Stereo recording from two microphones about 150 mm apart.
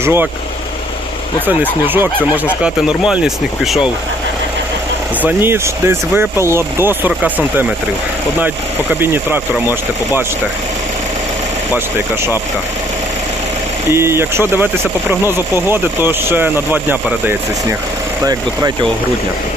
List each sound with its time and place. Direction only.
0.0 s speech: 15° right (ahead or behind)
1.9 s speech: 15° right (ahead or behind)
5.2 s speech: 15° right (ahead or behind)
9.0 s speech: 15° right (ahead or behind)
13.9 s speech: 15° right (ahead or behind)
18.2 s speech: 25° right (ahead or behind)